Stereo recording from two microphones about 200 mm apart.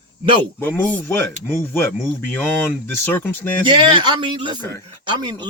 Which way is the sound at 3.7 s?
25° right (ahead or behind).